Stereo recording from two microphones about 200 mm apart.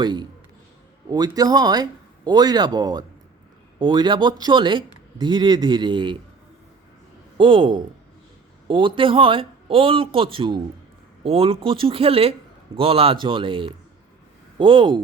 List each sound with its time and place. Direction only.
0.0 s speech: 20° right (ahead or behind)
7.3 s speech: 25° right (ahead or behind)